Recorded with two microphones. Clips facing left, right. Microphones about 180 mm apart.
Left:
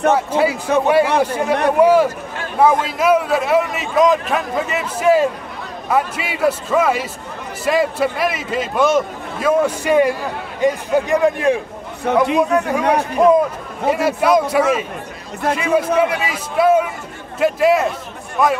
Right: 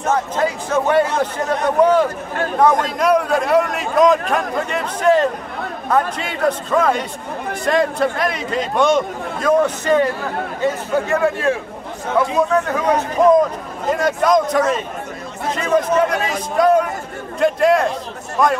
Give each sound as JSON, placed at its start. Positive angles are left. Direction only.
{"t": 0.3, "sound": "a man's voice", "side_deg": 10}
{"t": 16.1, "sound": "a man's voice", "side_deg": -45}
{"t": 16.5, "sound": "a man's voice", "side_deg": 5}